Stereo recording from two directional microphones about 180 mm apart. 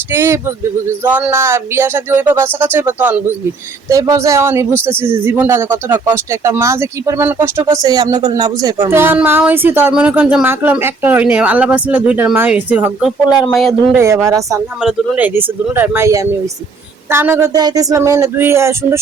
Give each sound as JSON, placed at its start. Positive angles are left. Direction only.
{"t": 0.1, "sound": "speech", "side_deg": -15}
{"t": 13.9, "sound": "speech", "side_deg": -15}